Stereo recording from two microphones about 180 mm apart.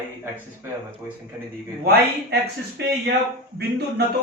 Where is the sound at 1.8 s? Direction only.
65° right (ahead or behind).